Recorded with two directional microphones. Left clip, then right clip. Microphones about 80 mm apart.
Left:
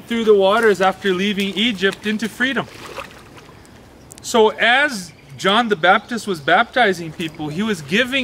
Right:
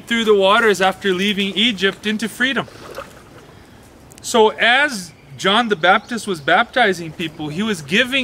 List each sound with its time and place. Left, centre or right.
0.1 s speech: right
1.0 s speech: centre
2.8 s boat: left
4.2 s speech: centre